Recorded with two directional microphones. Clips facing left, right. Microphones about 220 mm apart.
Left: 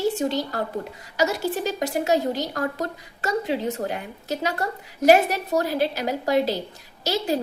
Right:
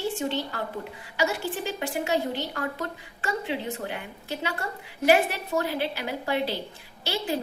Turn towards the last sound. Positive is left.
turn(degrees=40)  # may be behind; listen again after turning